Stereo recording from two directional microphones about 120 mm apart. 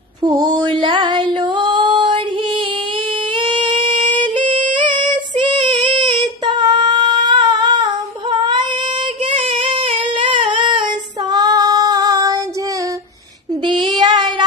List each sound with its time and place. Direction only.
0.2 s a sound: 35° right (ahead or behind)
4.2 s female singing: 45° right (ahead or behind)
9.2 s child singing: 45° right (ahead or behind); by 12.4 s 30° right (ahead or behind)
13.9 s child singing: 40° right (ahead or behind)